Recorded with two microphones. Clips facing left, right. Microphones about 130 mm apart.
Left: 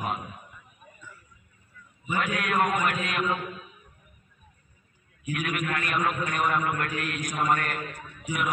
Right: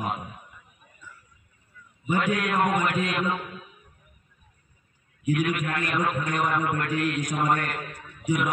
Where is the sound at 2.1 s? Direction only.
25° right (ahead or behind).